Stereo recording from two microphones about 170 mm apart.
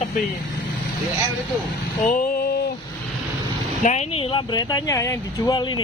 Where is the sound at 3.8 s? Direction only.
40° left (ahead or behind); by 5.8 s 25° left (ahead or behind).